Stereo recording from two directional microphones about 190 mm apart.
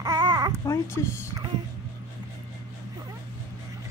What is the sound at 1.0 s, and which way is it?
Speech, 15° left (ahead or behind).